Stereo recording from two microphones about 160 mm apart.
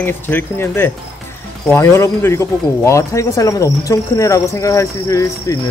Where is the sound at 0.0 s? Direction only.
15° left (ahead or behind).